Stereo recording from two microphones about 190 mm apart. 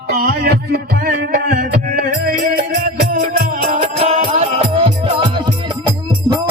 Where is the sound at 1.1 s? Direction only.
50° right (ahead or behind).